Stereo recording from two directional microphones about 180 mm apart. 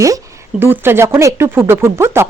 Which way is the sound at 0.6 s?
10° right (ahead or behind).